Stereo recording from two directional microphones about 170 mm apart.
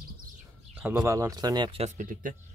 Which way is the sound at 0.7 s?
10° right (ahead or behind).